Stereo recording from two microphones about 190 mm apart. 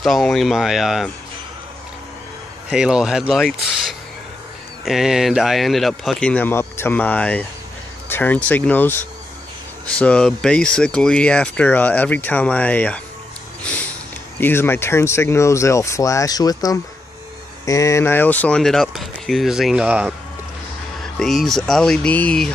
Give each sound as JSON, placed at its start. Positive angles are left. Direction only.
{"t": 0.0, "sound": "speech", "side_deg": 0}
{"t": 2.7, "sound": "speech", "side_deg": -5}
{"t": 4.8, "sound": "speech", "side_deg": -5}
{"t": 9.9, "sound": "speech", "side_deg": 5}
{"t": 14.4, "sound": "speech", "side_deg": 10}